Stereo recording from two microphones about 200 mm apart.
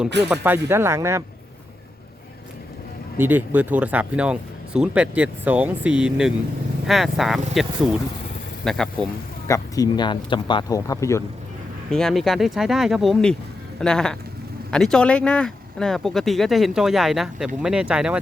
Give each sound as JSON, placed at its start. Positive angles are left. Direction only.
{"t": 0.3, "sound": "speech", "side_deg": -10}
{"t": 3.2, "sound": "speech", "side_deg": -10}
{"t": 9.5, "sound": "speech", "side_deg": 20}
{"t": 11.9, "sound": "speech", "side_deg": 5}